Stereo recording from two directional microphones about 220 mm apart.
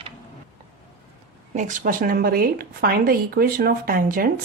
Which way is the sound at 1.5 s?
35° right (ahead or behind).